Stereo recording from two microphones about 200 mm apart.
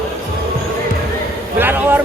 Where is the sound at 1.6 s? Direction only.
10° right (ahead or behind).